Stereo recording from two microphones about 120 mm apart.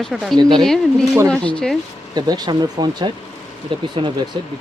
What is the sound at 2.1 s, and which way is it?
Speech, 35° right (ahead or behind).